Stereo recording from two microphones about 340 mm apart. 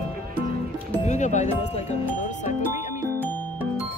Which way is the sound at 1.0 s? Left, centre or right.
Left.